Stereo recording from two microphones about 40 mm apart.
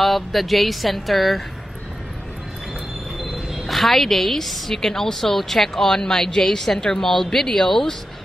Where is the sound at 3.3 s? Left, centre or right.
Centre.